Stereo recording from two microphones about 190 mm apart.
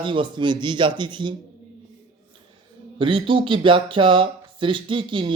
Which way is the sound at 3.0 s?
25° right (ahead or behind).